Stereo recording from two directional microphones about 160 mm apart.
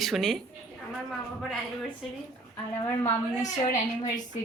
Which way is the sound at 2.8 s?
15° left (ahead or behind).